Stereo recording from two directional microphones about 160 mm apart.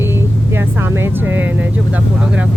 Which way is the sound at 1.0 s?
10° right (ahead or behind).